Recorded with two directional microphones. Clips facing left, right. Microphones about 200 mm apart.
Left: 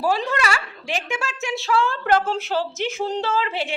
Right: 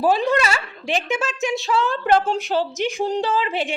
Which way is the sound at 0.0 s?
15° right (ahead or behind).